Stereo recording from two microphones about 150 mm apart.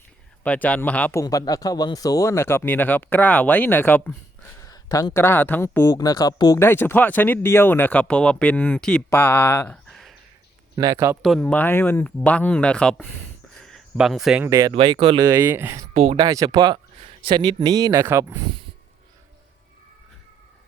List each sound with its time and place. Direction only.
0.4 s speech: 10° left (ahead or behind)
1.2 s speech: 25° left (ahead or behind)
4.6 s speech: 25° left (ahead or behind)
9.9 s a sound: centre (ahead or behind)
10.8 s speech: 25° right (ahead or behind)
11.2 s speech: centre (ahead or behind)
13.6 s a sound: 5° left (ahead or behind)
13.9 s speech: 5° right (ahead or behind)
14.4 s speech: 20° right (ahead or behind)
14.7 s speech: 35° right (ahead or behind)
15.3 s speech: 15° right (ahead or behind)
16.0 s speech: 40° right (ahead or behind)
16.2 s speech: 25° right (ahead or behind)
17.0 s speech: 35° right (ahead or behind); by 18.3 s 15° right (ahead or behind)